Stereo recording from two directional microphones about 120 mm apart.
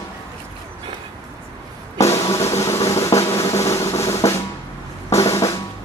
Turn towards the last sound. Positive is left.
turn(degrees=25)  # may be behind; listen again after turning